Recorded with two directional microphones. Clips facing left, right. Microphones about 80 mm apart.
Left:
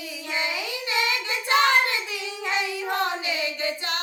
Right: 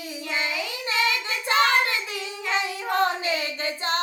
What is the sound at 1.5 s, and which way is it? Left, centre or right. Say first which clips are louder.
Child singing: left 1 dB; right.